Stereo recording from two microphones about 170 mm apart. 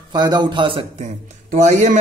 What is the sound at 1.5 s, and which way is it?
Speech, 45° right (ahead or behind).